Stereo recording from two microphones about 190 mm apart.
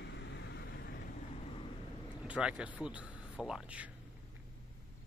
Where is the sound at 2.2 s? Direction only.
5° right (ahead or behind).